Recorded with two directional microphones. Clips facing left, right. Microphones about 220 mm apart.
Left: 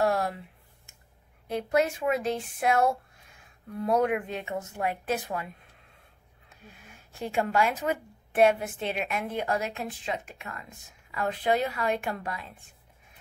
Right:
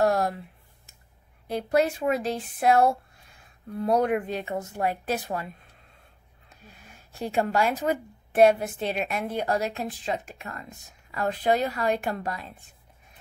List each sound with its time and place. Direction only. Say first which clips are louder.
0.0 s a sound: right 3 dB; 40° right (ahead or behind)
1.5 s a woman's voice: right 2 dB; 35° right (ahead or behind)
7.1 s a woman's voice: right 3 dB; 35° right (ahead or behind)